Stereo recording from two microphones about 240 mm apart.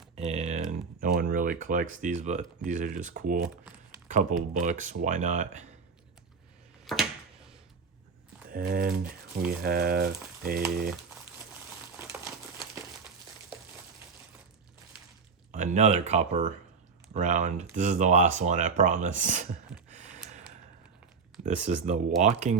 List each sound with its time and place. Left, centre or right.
0.3 s typing: right
0.7 s speech: right
6.9 s a sound: centre
8.4 s speech: right
11.9 s crumpling: centre
15.5 s speech: right
19.9 s a sound: right
21.4 s speech: right